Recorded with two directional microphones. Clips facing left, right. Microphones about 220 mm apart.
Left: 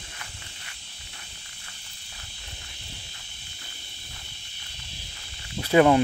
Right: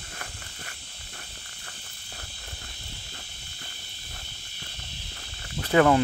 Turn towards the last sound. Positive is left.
turn(degrees=20)  # may be behind; listen again after turning